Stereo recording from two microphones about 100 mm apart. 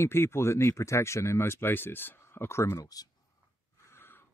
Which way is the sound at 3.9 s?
20° left (ahead or behind).